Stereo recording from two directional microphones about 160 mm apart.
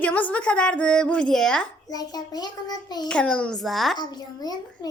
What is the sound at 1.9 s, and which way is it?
A child's voice, 25° left (ahead or behind).